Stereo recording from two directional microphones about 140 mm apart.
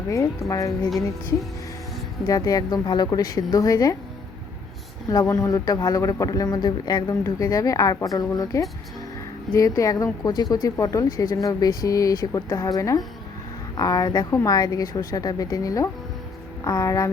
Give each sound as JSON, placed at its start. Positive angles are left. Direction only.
{"t": 0.1, "sound": "speech", "side_deg": 25}
{"t": 2.2, "sound": "speech", "side_deg": 25}
{"t": 5.0, "sound": "speech", "side_deg": 25}